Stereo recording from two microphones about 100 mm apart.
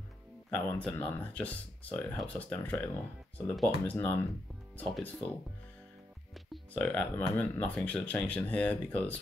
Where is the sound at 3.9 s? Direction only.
20° left (ahead or behind).